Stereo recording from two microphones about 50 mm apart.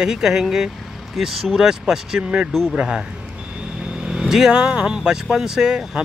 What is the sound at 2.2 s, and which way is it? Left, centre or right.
Speech, right.